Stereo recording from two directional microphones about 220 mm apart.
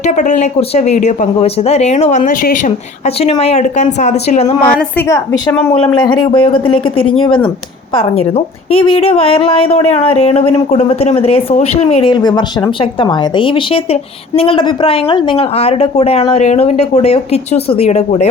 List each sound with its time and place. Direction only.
0.0 s speech: 35° left (ahead or behind)
4.8 s a woman's voice: 10° left (ahead or behind); by 18.3 s 30° left (ahead or behind)